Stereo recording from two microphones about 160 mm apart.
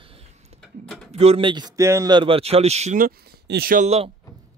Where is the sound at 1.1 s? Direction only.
40° right (ahead or behind).